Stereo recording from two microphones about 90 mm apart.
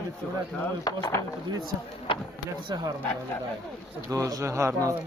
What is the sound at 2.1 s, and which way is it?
Speech, 70° left (ahead or behind).